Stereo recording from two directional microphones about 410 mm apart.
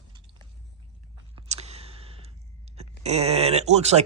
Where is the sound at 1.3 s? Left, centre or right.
Centre.